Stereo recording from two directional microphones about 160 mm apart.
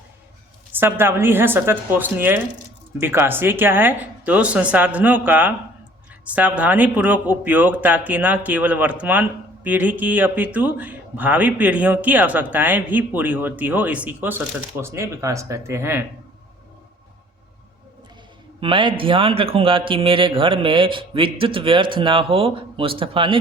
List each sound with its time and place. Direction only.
0.7 s speech: 15° right (ahead or behind)
18.6 s speech: 30° right (ahead or behind)